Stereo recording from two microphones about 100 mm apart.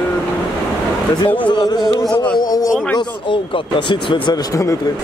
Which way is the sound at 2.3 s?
40° left (ahead or behind).